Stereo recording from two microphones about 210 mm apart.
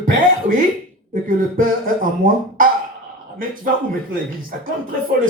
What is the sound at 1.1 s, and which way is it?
Speech, 40° right (ahead or behind).